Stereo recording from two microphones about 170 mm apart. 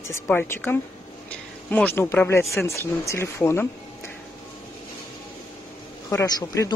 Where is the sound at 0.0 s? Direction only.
10° left (ahead or behind).